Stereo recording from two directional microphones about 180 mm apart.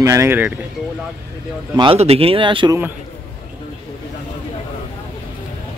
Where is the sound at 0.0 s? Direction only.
15° right (ahead or behind).